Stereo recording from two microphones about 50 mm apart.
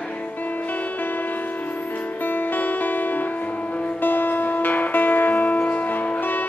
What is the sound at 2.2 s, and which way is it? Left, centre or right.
Music, left.